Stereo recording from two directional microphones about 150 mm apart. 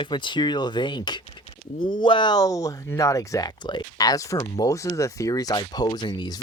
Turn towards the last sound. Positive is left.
turn(degrees=30)  # may be behind; listen again after turning